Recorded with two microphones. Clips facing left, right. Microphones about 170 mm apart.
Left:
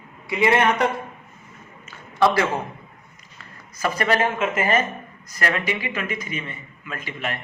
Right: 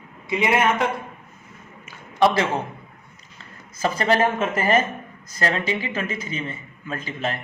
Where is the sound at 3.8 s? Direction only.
30° right (ahead or behind).